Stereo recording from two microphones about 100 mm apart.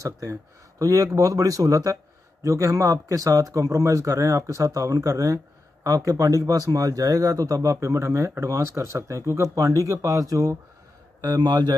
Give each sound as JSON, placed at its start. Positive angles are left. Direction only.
{"t": 0.0, "sound": "speech", "side_deg": -35}